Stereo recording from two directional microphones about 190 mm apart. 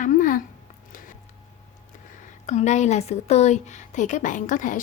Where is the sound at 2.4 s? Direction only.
40° left (ahead or behind).